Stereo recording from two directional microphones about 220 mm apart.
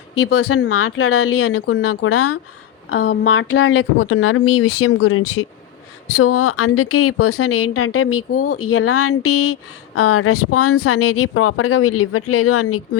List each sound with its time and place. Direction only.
0.3 s speech: 90° left
0.7 s speech: 75° left (ahead or behind)
6.1 s speech: 85° left